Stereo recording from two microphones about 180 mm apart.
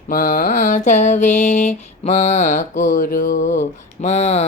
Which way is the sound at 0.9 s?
40° left (ahead or behind).